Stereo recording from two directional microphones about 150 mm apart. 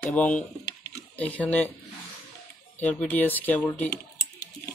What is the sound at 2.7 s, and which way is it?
Speech, 10° left (ahead or behind).